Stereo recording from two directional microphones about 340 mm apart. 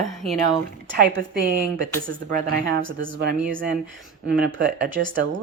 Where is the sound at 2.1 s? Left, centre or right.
Right.